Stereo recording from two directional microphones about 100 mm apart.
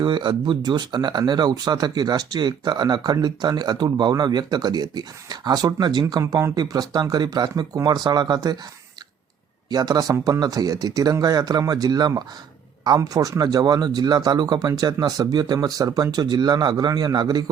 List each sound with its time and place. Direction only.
0.0 s speech: 50° right (ahead or behind)
9.6 s speech: 40° right (ahead or behind)